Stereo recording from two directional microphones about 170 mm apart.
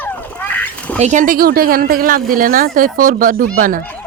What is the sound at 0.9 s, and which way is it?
Speech, 45° right (ahead or behind).